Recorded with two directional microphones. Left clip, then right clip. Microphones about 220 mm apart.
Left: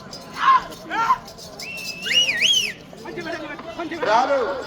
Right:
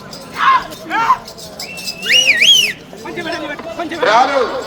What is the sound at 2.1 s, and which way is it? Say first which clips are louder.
Car alarm: right 9 dB; 20° right (ahead or behind).